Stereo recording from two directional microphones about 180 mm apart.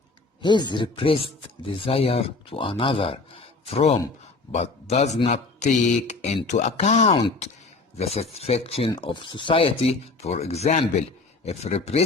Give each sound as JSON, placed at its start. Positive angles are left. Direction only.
{"t": 0.7, "sound": "speech", "side_deg": 30}